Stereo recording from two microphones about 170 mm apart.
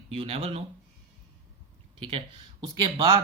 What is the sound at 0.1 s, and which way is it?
Speech, 35° right (ahead or behind).